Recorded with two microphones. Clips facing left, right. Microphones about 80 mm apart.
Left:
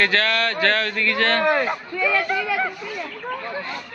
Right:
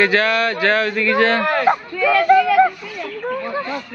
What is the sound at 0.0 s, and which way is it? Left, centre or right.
Speech, centre.